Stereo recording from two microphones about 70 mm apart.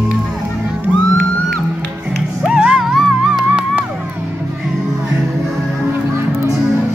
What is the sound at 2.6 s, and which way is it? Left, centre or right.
Music, centre.